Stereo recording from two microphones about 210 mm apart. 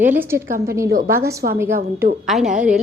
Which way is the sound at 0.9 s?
45° right (ahead or behind).